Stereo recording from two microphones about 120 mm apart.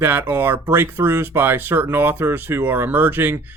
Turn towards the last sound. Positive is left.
turn(degrees=-20)  # may be behind; listen again after turning